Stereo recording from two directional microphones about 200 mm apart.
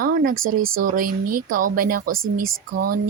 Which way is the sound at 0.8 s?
45° right (ahead or behind).